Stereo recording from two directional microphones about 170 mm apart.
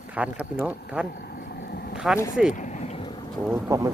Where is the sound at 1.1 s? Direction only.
65° left (ahead or behind).